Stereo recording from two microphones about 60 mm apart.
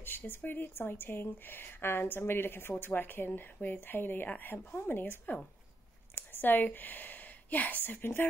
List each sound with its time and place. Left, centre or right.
0.0 s a woman's voice: left